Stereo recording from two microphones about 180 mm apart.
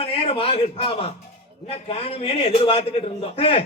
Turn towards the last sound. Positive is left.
turn(degrees=30)  # may be behind; listen again after turning